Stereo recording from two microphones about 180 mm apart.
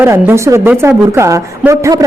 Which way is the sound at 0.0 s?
15° right (ahead or behind).